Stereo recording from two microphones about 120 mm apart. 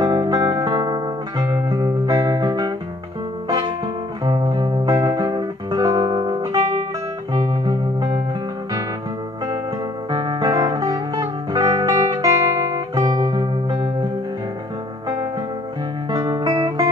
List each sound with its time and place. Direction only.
0.0 s music: 35° right (ahead or behind)
5.0 s guitar: 35° right (ahead or behind)
7.6 s music: 40° right (ahead or behind)
10.1 s music: 35° right (ahead or behind)
12.9 s music: 45° right (ahead or behind)
13.2 s music: 35° right (ahead or behind)
16.1 s music: 35° right (ahead or behind)